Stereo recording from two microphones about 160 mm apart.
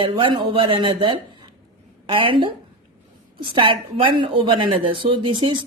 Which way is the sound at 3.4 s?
30° right (ahead or behind).